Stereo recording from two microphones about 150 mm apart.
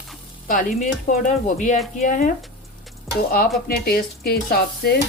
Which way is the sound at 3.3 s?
90° left.